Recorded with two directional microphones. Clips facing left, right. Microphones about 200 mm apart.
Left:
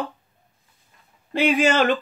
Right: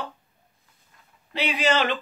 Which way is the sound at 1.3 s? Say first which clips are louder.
Left 5 dB; 50° left (ahead or behind).